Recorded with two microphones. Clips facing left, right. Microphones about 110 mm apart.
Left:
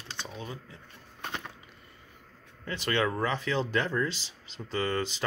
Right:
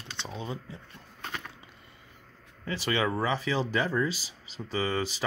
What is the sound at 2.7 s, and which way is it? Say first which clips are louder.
Speech: even; 5° right (ahead or behind).